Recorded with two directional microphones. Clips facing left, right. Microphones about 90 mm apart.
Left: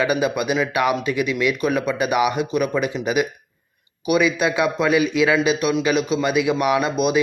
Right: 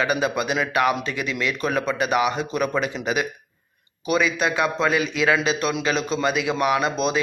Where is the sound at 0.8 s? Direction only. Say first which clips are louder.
Right 1 dB; 20° left (ahead or behind).